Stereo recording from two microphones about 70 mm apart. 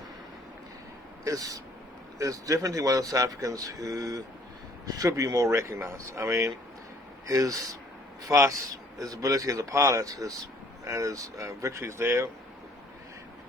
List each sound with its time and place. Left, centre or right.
1.2 s speech: right
7.3 s speech: right